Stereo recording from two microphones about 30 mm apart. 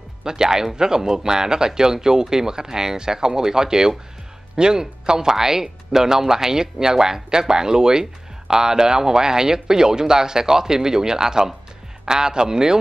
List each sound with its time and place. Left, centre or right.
0.2 s speech: right